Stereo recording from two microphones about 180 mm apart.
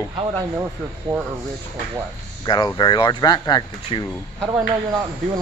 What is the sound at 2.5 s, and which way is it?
Speech, 25° left (ahead or behind).